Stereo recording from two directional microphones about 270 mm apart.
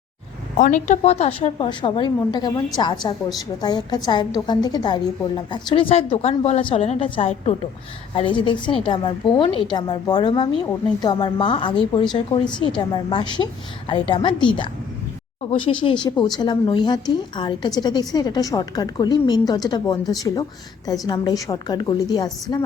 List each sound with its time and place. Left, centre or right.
0.5 s a woman's voice: left
15.8 s a woman's voice: centre